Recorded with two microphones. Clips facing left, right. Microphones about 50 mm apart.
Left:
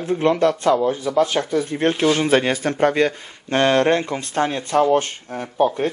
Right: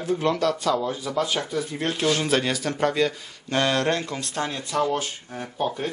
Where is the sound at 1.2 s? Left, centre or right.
Left.